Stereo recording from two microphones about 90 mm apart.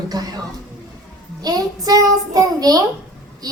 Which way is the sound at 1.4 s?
45° right (ahead or behind).